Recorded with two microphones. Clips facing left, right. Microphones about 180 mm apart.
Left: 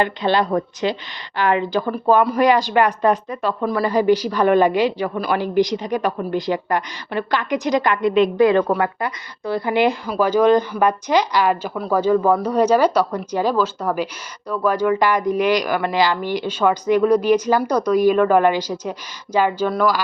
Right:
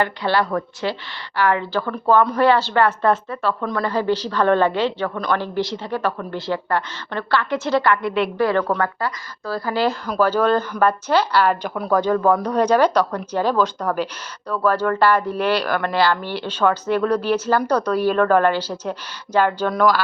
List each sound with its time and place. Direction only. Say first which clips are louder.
0.0 s speech: left 2 dB; 20° left (ahead or behind)